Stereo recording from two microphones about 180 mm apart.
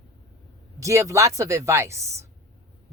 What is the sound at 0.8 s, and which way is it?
Speech, 15° right (ahead or behind).